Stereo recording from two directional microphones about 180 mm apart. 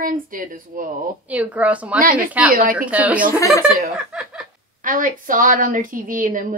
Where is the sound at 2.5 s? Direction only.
50° right (ahead or behind).